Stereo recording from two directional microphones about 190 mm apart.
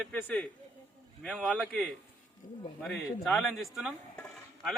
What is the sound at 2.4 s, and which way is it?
Speech, 45° left (ahead or behind).